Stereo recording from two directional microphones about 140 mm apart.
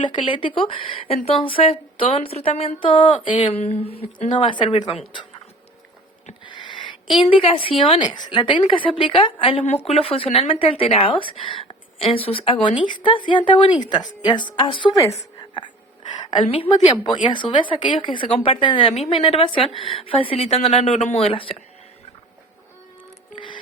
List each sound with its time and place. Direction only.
0.0 s speech: 35° left (ahead or behind)
6.4 s speech: 35° left (ahead or behind)
16.3 s speech: 40° left (ahead or behind)